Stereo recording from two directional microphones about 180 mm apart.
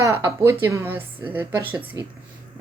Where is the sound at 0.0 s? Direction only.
15° right (ahead or behind).